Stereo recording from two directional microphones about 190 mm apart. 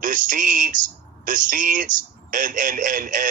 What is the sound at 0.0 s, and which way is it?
A man's voice, 45° right (ahead or behind).